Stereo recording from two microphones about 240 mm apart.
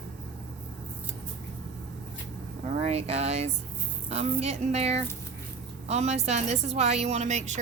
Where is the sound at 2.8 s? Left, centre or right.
Right.